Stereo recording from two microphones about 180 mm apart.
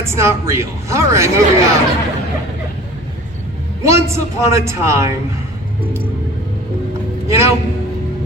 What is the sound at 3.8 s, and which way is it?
A man's voice, 15° right (ahead or behind).